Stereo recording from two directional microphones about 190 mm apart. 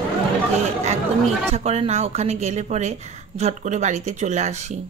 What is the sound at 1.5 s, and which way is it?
Speech, 35° right (ahead or behind).